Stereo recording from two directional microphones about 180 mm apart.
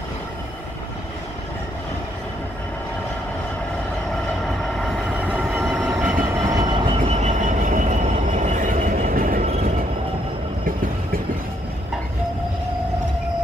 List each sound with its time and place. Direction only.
4.7 s train: centre (ahead or behind)
6.5 s train: 25° right (ahead or behind)
7.0 s train: 40° right (ahead or behind)